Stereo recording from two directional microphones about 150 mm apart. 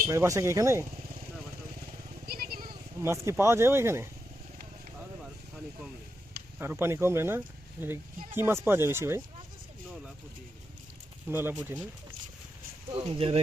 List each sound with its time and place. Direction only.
0.1 s speech: 20° right (ahead or behind)
2.2 s vehicle: 80° right
3.0 s speech: 15° right (ahead or behind)
6.6 s speech: 15° right (ahead or behind)
11.3 s speech: 15° right (ahead or behind)
12.9 s speech: 35° right (ahead or behind)